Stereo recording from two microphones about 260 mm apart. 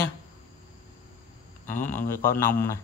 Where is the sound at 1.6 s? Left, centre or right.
Centre.